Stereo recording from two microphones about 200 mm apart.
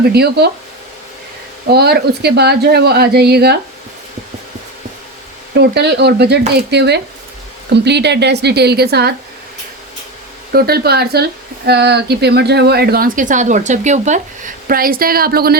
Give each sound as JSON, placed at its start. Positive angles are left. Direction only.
{"t": 0.1, "sound": "a woman's voice", "side_deg": -55}
{"t": 1.7, "sound": "a woman's voice", "side_deg": -55}
{"t": 5.5, "sound": "a woman's voice", "side_deg": -55}
{"t": 10.5, "sound": "a woman's voice", "side_deg": -50}